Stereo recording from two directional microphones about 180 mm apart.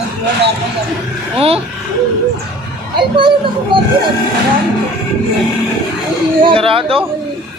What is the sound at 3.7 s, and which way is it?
Speech, 25° right (ahead or behind).